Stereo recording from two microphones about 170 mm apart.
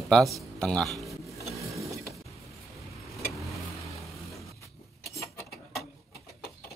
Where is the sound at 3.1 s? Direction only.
Centre (ahead or behind).